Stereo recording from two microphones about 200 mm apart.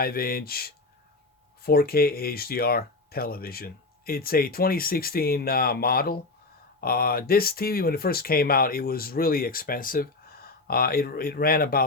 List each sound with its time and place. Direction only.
0.0 s speech: 50° left (ahead or behind)